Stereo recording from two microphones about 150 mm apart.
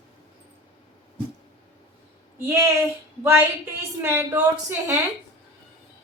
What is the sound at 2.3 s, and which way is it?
Speech, 15° right (ahead or behind).